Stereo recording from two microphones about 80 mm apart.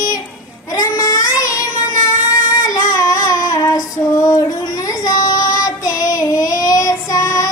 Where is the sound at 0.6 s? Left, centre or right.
Left.